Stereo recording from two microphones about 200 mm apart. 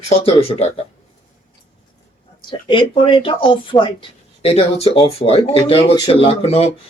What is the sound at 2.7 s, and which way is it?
Speech, 25° left (ahead or behind).